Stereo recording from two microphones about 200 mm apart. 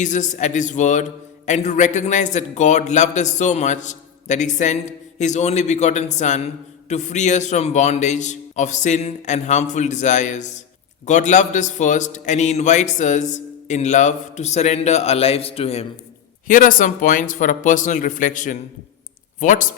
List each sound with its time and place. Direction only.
0.0 s a man's voice: 40° left (ahead or behind)
16.5 s a man's voice: 40° left (ahead or behind)